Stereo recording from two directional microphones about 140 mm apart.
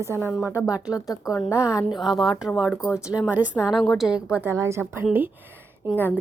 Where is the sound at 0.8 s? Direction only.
25° left (ahead or behind).